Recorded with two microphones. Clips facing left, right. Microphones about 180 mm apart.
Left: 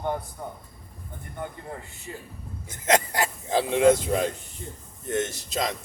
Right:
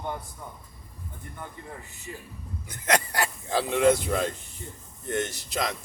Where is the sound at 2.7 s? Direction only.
25° left (ahead or behind).